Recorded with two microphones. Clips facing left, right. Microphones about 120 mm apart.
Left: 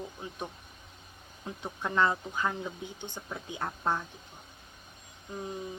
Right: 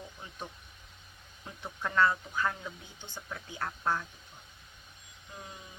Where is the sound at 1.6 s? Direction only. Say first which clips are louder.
Even; 20° left (ahead or behind).